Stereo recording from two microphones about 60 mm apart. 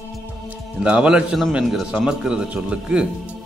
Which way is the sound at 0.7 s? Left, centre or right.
Centre.